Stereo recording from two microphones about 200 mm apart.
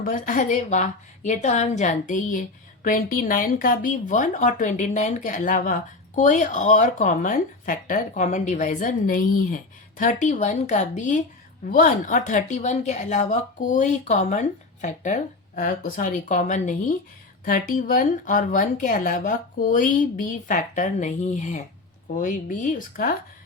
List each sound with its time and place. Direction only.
0.0 s speech: 40° left (ahead or behind)